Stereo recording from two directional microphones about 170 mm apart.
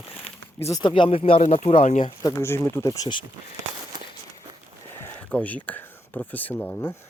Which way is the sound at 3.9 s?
25° right (ahead or behind).